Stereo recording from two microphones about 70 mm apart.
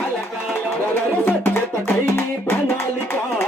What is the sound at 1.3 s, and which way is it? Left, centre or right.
Music, left.